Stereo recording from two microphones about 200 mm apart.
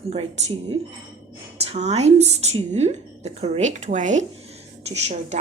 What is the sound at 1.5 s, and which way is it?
A woman's voice, 35° right (ahead or behind).